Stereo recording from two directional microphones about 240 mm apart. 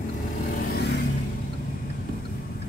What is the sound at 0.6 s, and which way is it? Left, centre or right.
Vehicle, left.